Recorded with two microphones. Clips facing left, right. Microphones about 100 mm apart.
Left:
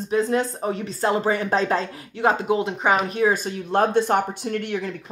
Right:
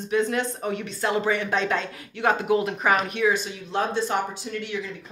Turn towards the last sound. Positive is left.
turn(degrees=55)  # may be behind; listen again after turning